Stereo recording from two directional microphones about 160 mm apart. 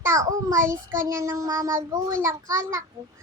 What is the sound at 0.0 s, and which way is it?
Child singing, 20° right (ahead or behind).